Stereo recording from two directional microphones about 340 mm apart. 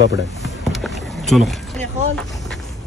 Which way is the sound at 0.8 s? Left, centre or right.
Centre.